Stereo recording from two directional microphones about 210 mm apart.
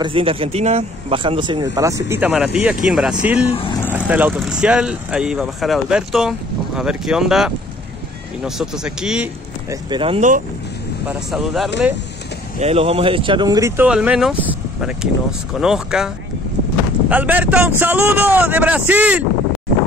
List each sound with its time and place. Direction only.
0.0 s speech: 25° right (ahead or behind); by 9.3 s 5° right (ahead or behind)
9.7 s speech: 20° right (ahead or behind)
11.1 s speech: centre (ahead or behind)
12.5 s speech: 30° right (ahead or behind); by 16.1 s 5° right (ahead or behind)
17.1 s speech: 5° right (ahead or behind)